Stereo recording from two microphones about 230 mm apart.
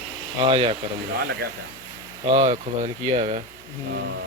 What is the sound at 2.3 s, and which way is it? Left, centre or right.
Speech, right.